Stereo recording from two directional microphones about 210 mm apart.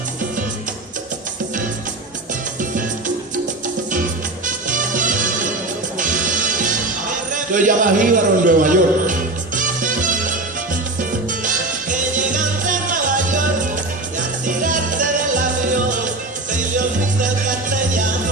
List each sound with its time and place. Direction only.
4.4 s music: 40° right (ahead or behind)
7.3 s a man's voice: 40° right (ahead or behind)
9.6 s music: 40° right (ahead or behind)
14.6 s music: 40° right (ahead or behind)
16.5 s music: 40° right (ahead or behind)